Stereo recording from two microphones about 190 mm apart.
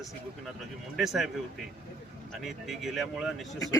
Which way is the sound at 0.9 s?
Centre (ahead or behind).